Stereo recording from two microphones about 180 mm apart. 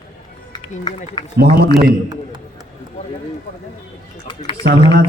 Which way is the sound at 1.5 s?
60° right (ahead or behind).